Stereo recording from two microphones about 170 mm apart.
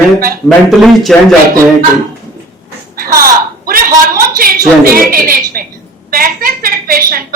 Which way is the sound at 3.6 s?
55° right (ahead or behind).